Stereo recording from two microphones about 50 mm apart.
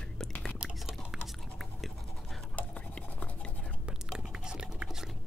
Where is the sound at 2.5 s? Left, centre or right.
Left.